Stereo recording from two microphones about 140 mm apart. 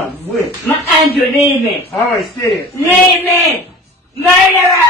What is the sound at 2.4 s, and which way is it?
A man's voice, 15° left (ahead or behind).